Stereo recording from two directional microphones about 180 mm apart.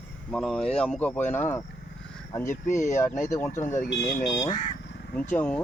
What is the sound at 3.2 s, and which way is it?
Speech, 15° left (ahead or behind).